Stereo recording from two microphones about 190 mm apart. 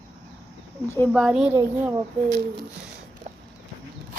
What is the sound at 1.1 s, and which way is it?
Speech, 5° right (ahead or behind).